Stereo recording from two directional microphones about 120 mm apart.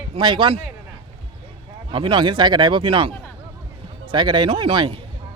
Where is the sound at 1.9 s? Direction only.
45° right (ahead or behind).